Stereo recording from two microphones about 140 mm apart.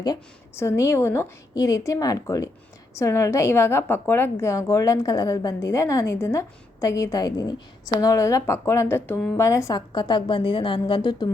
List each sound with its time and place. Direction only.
0.5 s a woman's voice: 20° left (ahead or behind)